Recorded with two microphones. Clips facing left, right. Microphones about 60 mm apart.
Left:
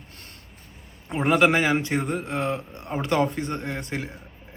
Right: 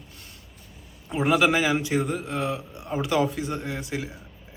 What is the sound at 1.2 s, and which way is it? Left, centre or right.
Speech, centre.